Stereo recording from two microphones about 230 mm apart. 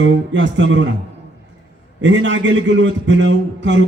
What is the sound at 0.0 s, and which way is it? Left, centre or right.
Speech, right.